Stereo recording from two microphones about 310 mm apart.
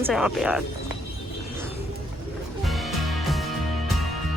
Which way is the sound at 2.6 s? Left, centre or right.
Centre.